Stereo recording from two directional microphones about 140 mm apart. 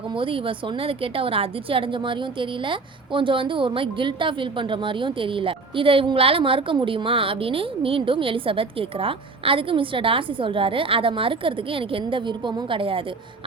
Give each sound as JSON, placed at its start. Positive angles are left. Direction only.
{"t": 0.2, "sound": "a woman's voice", "side_deg": -40}